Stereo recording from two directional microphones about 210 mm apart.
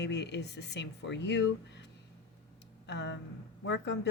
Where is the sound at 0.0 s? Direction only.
55° left (ahead or behind).